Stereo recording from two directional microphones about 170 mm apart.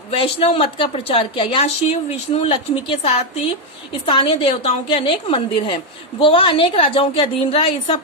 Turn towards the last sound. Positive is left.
turn(degrees=35)  # may be behind; listen again after turning